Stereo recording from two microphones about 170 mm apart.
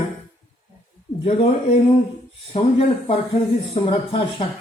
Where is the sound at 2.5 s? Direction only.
35° left (ahead or behind).